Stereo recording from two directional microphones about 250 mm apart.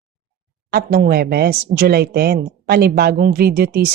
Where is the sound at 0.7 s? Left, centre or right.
Right.